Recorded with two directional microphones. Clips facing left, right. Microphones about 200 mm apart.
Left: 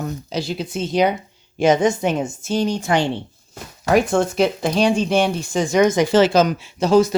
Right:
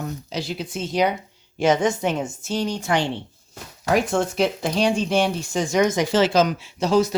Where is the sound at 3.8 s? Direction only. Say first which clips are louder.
Left 4 dB; 50° left (ahead or behind).